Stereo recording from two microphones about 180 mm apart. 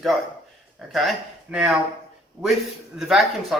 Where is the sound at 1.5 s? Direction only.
5° right (ahead or behind).